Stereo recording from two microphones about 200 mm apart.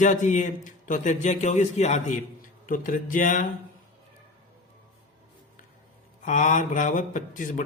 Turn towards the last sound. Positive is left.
turn(degrees=40)  # may be behind; listen again after turning